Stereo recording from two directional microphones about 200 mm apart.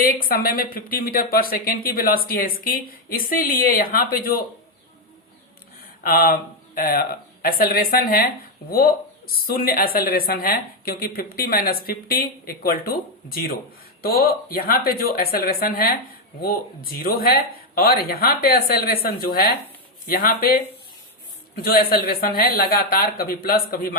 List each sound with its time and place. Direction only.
0.0 s a woman's voice: 45° left (ahead or behind)
6.0 s a woman's voice: 45° left (ahead or behind)
21.5 s a woman's voice: 50° left (ahead or behind)